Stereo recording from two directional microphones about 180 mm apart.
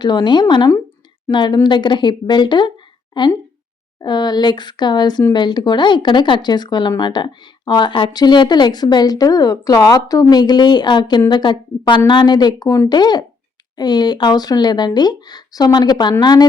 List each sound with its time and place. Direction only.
0.0 s speech: 25° left (ahead or behind)